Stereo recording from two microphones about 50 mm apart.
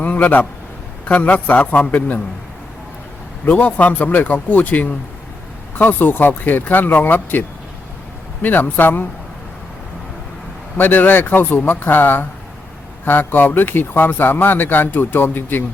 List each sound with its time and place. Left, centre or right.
0.0 s a man's voice: left
3.4 s speech: left
10.8 s speech: left